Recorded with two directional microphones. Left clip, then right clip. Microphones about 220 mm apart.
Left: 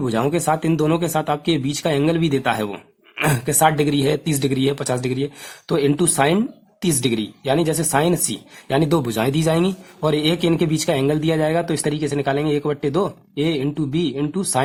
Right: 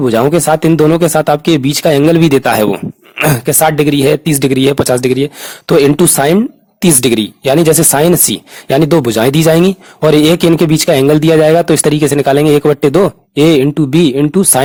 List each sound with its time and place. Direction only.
0.0 s speech: 40° right (ahead or behind)